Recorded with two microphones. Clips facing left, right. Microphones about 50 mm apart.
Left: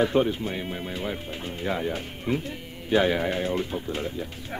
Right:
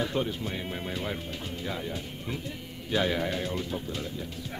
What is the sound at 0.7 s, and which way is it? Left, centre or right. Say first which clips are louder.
Speech: left 2 dB; centre.